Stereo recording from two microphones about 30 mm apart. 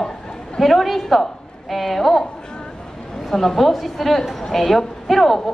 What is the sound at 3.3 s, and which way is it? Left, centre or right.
A woman's voice, centre.